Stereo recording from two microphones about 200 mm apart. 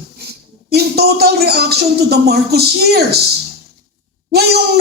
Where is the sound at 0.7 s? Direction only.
55° right (ahead or behind).